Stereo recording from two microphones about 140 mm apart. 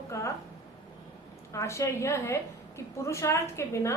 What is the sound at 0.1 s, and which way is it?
Speech, 20° left (ahead or behind).